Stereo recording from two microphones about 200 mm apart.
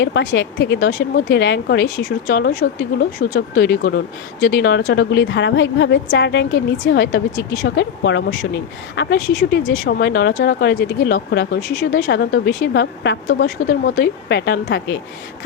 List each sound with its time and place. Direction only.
0.0 s speech: 60° left (ahead or behind)
13.9 s speech: 55° left (ahead or behind)